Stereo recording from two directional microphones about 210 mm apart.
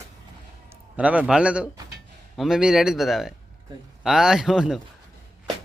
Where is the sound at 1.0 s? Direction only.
5° right (ahead or behind).